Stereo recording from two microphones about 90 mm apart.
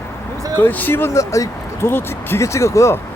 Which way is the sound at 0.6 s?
20° left (ahead or behind).